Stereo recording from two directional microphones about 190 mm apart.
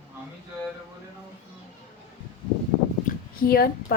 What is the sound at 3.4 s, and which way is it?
Speech, 50° left (ahead or behind).